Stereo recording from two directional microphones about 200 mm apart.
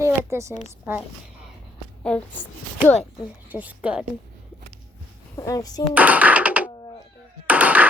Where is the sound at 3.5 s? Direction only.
5° right (ahead or behind).